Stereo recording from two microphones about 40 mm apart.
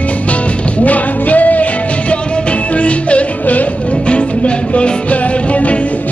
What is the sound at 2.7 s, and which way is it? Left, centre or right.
Music, left.